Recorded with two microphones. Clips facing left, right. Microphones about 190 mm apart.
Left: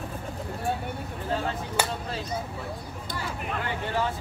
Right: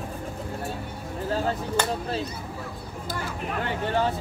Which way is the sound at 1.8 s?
10° left (ahead or behind).